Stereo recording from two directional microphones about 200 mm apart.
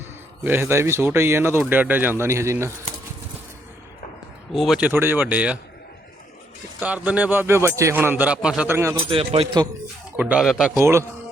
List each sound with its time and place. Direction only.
0.4 s speech: 10° right (ahead or behind)
4.5 s speech: centre (ahead or behind)
6.7 s speech: 5° right (ahead or behind)
9.0 s speech: 25° right (ahead or behind)
10.2 s speech: 5° right (ahead or behind)
10.8 s speech: 15° right (ahead or behind)